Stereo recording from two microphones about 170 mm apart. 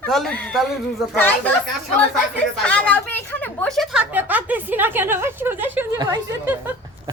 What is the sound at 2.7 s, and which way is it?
Speech, 5° left (ahead or behind).